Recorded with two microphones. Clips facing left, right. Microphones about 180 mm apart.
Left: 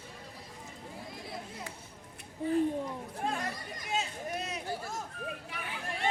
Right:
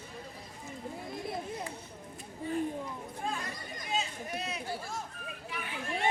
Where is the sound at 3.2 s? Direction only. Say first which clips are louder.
Left 3 dB; 65° left (ahead or behind).